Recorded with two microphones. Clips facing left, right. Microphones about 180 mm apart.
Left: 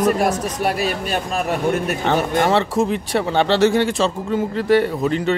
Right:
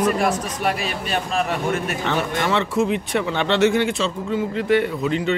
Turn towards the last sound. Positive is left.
turn(degrees=45)  # may be behind; listen again after turning